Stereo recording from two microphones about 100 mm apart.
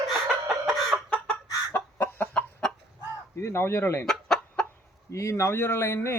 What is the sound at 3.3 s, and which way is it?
Speech, 25° left (ahead or behind).